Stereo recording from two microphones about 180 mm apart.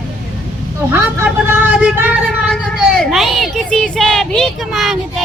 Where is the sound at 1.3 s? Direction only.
5° right (ahead or behind).